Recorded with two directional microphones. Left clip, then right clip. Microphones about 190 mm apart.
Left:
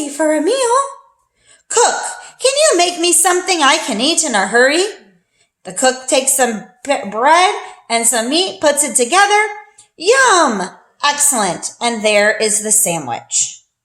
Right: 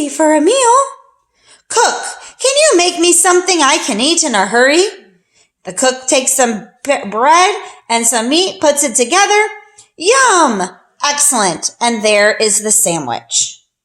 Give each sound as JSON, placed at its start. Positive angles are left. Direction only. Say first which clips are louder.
{"t": 0.0, "sound": "a woman's voice", "louder": "right 4 dB", "side_deg": -45}